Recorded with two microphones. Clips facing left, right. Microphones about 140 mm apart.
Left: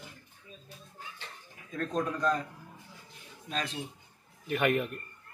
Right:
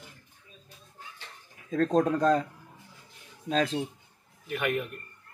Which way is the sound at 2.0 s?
90° right.